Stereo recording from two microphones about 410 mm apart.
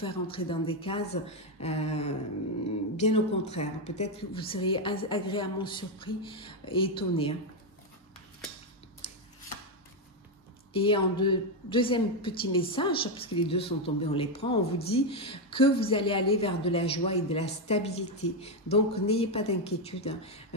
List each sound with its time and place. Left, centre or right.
0.0 s a woman's voice: centre
9.0 s a sound: centre
10.7 s a woman's voice: centre